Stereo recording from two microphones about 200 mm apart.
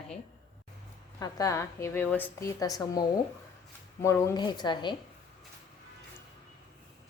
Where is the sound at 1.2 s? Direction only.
15° left (ahead or behind).